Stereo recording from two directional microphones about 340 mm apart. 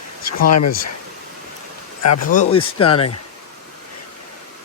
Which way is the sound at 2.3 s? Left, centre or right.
Centre.